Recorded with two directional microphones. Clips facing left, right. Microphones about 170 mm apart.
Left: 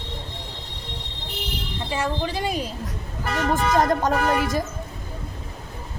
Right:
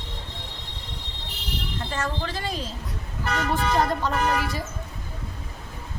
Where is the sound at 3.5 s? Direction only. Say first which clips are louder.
Left 4 dB; 45° left (ahead or behind).